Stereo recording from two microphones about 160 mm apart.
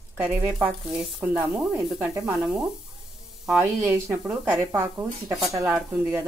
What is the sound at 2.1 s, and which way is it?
Speech, 20° right (ahead or behind).